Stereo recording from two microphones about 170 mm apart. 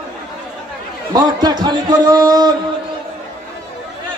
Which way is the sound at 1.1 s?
25° right (ahead or behind).